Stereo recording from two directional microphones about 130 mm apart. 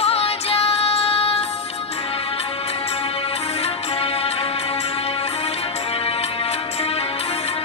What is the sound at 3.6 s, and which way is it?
Music, 50° left (ahead or behind).